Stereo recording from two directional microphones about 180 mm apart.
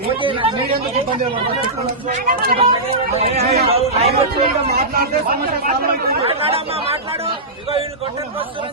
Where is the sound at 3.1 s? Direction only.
35° right (ahead or behind).